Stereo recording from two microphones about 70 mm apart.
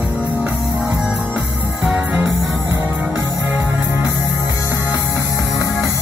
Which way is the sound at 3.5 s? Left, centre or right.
Right.